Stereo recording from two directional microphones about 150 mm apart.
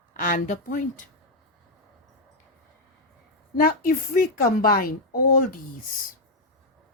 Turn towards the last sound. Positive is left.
turn(degrees=75)  # may be behind; listen again after turning